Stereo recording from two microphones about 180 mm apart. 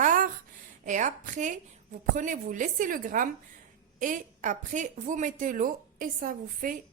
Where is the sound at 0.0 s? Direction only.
45° right (ahead or behind).